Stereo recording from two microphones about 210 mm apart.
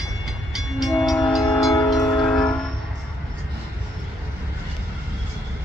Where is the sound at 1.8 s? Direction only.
20° left (ahead or behind).